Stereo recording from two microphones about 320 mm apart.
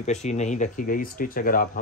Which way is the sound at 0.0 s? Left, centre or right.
Left.